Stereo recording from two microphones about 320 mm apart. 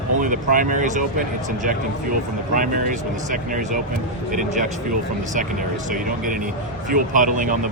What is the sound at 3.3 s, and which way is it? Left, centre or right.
Speech, right.